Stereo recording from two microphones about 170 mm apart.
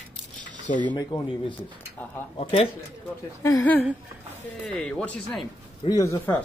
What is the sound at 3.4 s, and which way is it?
A man's voice, 15° left (ahead or behind).